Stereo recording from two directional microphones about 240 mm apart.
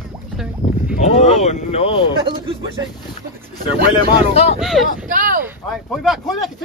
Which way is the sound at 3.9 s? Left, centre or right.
Left.